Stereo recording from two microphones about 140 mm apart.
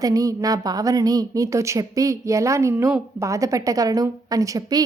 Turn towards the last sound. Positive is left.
turn(degrees=-25)  # may be behind; listen again after turning